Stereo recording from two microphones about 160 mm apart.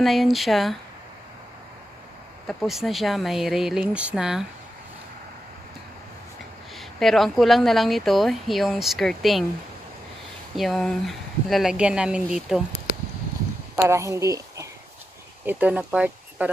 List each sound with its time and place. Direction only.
0.0 s a woman's voice: centre (ahead or behind)
2.4 s a woman's voice: centre (ahead or behind)
6.8 s a woman's voice: centre (ahead or behind)
10.5 s a woman's voice: centre (ahead or behind)
13.8 s speech: 20° right (ahead or behind)